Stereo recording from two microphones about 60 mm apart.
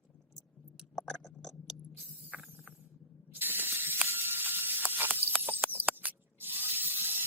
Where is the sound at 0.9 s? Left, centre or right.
Centre.